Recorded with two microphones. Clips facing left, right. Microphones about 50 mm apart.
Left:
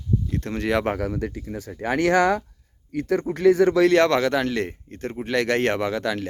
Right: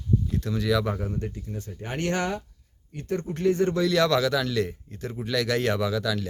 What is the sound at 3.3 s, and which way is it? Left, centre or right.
Speech, left.